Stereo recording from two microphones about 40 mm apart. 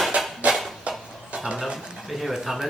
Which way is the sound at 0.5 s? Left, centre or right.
Centre.